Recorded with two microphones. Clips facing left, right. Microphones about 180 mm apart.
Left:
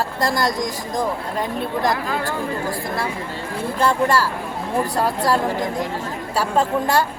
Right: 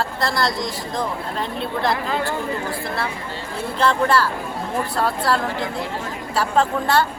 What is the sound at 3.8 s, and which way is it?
Speech, 10° left (ahead or behind).